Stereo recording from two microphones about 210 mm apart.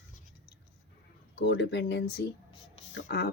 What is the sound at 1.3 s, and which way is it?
Speech, 55° left (ahead or behind).